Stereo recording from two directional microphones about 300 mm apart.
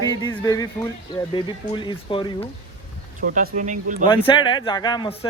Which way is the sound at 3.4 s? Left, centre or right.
Right.